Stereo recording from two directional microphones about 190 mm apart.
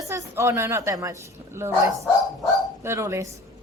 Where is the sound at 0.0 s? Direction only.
15° right (ahead or behind).